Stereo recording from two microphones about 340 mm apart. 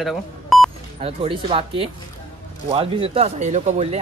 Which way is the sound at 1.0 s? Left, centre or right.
Centre.